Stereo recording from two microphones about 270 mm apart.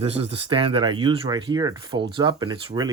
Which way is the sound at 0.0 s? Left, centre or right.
Right.